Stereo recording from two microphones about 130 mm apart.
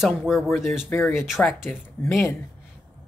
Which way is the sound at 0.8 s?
15° left (ahead or behind).